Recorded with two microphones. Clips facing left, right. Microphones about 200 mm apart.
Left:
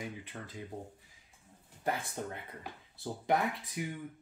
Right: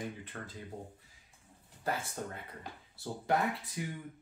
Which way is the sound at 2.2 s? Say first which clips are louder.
Left 1 dB; 20° left (ahead or behind).